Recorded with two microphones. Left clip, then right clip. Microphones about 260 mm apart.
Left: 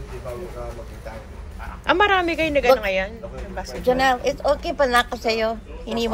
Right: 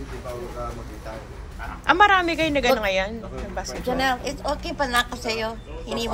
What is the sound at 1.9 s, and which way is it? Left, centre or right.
A woman's voice, centre.